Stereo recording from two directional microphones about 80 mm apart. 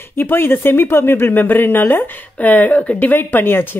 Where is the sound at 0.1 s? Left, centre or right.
Left.